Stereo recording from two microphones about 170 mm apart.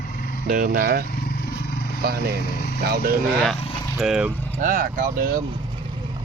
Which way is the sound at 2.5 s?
65° left (ahead or behind).